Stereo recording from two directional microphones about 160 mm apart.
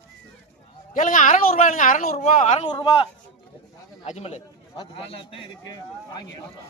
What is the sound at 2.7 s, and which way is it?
Speech, 30° left (ahead or behind).